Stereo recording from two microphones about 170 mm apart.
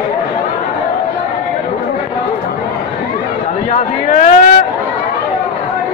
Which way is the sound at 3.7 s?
45° left (ahead or behind).